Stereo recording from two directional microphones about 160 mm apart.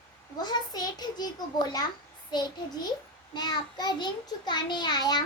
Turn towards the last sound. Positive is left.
turn(degrees=25)  # may be behind; listen again after turning